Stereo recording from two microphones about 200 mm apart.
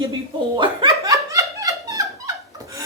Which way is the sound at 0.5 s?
25° right (ahead or behind).